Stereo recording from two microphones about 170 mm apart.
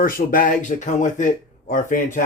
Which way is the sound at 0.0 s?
55° left (ahead or behind).